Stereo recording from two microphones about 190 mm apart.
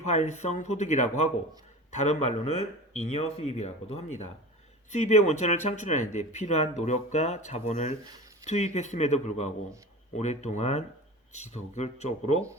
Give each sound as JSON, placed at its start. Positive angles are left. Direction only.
{"t": 0.0, "sound": "speech", "side_deg": 35}